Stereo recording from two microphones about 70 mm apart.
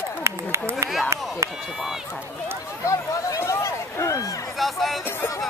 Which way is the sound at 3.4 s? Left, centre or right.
Left.